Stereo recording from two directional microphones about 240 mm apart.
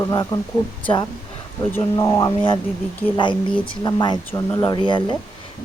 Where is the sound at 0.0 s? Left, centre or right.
Centre.